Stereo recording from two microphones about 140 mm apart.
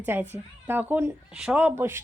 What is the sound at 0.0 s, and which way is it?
Speech, 15° right (ahead or behind).